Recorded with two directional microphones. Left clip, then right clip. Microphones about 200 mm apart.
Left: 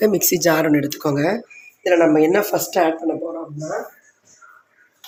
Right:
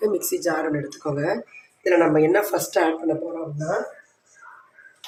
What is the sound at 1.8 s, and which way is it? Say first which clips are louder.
Speech: left 3 dB; 40° left (ahead or behind).